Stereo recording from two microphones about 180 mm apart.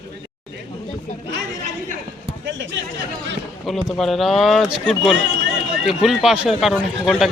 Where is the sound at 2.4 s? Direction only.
90° right.